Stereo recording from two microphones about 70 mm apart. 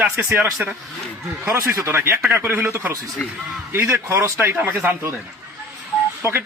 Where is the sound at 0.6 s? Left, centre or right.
Centre.